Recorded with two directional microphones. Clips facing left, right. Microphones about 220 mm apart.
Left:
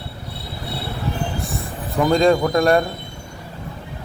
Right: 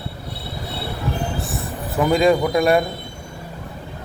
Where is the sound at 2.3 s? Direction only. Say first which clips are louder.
Even; 5° right (ahead or behind).